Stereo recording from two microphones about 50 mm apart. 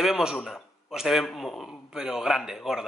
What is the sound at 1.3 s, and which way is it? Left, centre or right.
Speech, centre.